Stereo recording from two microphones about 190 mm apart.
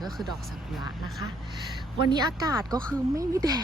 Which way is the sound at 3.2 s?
20° right (ahead or behind).